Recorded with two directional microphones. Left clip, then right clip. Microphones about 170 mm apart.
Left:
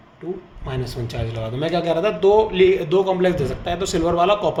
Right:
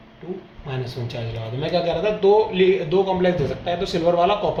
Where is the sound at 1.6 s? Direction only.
75° left (ahead or behind).